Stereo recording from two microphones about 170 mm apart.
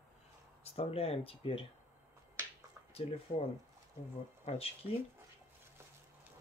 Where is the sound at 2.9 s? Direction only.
35° left (ahead or behind).